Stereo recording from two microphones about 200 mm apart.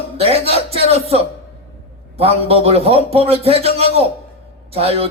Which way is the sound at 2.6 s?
30° right (ahead or behind).